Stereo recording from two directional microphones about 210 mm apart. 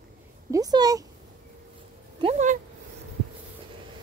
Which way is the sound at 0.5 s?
20° right (ahead or behind).